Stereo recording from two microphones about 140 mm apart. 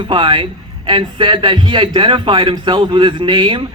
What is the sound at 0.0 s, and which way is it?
A man's voice, 35° right (ahead or behind).